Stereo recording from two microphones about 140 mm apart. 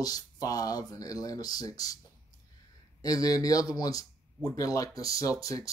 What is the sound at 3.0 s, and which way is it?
Speech, 25° left (ahead or behind).